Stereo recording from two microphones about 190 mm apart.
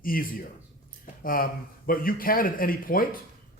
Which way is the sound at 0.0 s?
50° left (ahead or behind).